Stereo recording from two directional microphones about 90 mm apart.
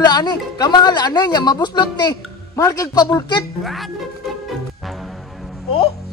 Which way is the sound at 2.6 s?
40° left (ahead or behind).